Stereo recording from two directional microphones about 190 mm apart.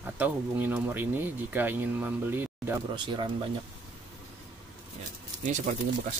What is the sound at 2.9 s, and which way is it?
Speech, 25° right (ahead or behind).